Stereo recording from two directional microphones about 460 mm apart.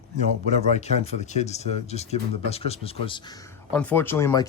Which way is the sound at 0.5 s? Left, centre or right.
Centre.